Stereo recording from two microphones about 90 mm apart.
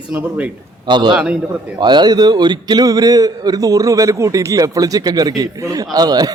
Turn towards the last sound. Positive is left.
turn(degrees=-45)  # may be behind; listen again after turning